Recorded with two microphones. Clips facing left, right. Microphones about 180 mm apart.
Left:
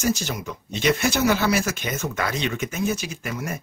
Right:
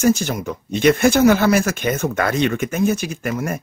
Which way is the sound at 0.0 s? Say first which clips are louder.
Right 7 dB; 50° right (ahead or behind).